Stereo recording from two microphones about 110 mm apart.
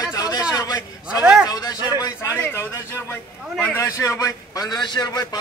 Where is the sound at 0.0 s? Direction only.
35° left (ahead or behind).